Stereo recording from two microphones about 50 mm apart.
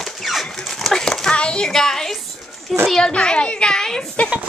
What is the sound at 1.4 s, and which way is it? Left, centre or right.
A child's voice, centre.